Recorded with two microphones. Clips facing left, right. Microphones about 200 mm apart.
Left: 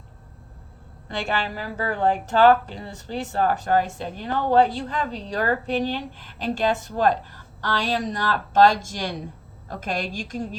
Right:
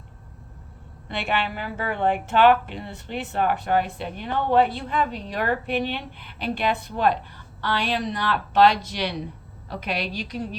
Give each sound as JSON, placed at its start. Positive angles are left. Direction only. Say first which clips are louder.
{"t": 1.0, "sound": "a woman's voice", "louder": "even", "side_deg": 40}